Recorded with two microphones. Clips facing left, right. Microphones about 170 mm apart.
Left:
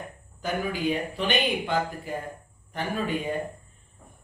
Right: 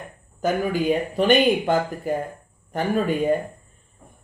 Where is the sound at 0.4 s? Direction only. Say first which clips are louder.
Right 6 dB; 45° right (ahead or behind).